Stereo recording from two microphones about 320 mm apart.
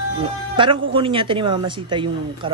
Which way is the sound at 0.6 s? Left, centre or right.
Centre.